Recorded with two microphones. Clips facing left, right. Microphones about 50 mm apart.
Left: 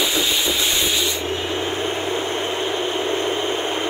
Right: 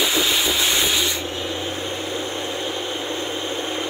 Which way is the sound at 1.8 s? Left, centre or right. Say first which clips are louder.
Left 4 dB; left.